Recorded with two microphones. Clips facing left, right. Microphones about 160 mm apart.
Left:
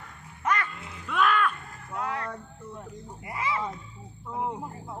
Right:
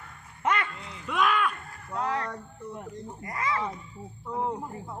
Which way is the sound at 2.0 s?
35° right (ahead or behind).